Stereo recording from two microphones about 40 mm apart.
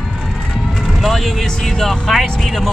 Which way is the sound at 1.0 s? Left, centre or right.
Centre.